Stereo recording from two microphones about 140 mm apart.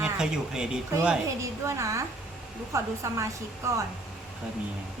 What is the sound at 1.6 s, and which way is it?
A woman's voice, 20° right (ahead or behind).